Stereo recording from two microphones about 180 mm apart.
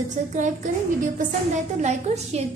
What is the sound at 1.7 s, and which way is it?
Speech, 40° right (ahead or behind).